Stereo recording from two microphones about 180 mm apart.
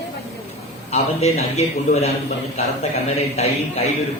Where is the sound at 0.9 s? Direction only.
35° left (ahead or behind).